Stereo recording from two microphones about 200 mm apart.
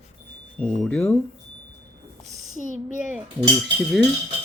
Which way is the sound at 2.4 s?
35° right (ahead or behind).